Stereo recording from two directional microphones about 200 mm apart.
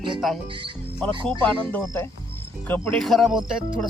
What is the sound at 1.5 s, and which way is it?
Speech, 10° left (ahead or behind).